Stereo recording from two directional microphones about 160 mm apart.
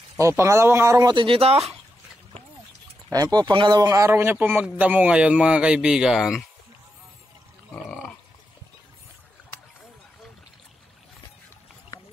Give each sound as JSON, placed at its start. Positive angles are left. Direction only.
{"t": 0.2, "sound": "a man's voice", "side_deg": -20}
{"t": 1.1, "sound": "speech", "side_deg": -35}
{"t": 3.1, "sound": "a man's voice", "side_deg": -25}
{"t": 7.7, "sound": "burping", "side_deg": 5}